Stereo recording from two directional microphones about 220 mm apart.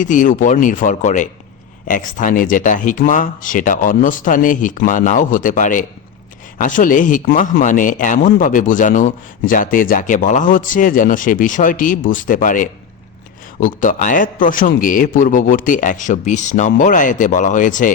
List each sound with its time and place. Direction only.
0.0 s a man's voice: 35° left (ahead or behind)